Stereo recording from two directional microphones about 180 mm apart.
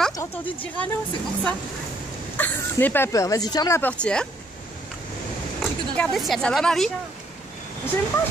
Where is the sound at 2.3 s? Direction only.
10° left (ahead or behind).